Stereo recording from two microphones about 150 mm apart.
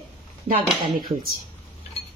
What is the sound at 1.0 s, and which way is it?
Speech, 75° right (ahead or behind).